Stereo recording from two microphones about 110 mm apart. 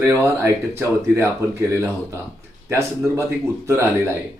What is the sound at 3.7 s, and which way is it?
Speech, 25° right (ahead or behind).